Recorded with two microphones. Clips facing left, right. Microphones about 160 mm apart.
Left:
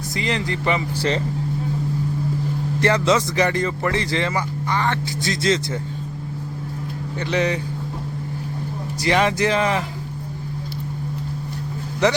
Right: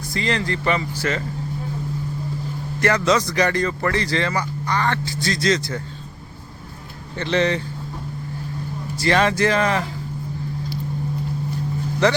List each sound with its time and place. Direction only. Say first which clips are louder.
0.1 s speech: right 1 dB; 20° left (ahead or behind)
2.8 s speech: even; 25° left (ahead or behind)
7.2 s speech: right 2 dB; 10° left (ahead or behind)
9.0 s speech: right 1 dB; 15° left (ahead or behind)